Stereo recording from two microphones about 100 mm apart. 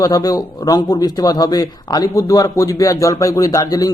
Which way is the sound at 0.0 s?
40° left (ahead or behind).